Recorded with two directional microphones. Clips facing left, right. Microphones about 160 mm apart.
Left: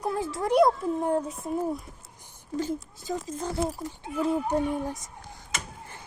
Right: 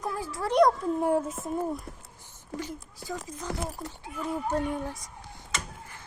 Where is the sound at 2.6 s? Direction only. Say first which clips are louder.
Left 7 dB; 25° left (ahead or behind).